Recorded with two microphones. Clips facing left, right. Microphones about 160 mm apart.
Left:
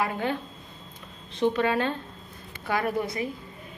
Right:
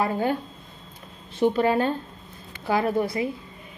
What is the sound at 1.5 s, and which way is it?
A woman's voice, 30° right (ahead or behind).